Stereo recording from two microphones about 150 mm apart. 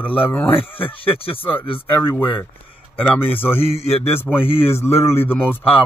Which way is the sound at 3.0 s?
15° left (ahead or behind).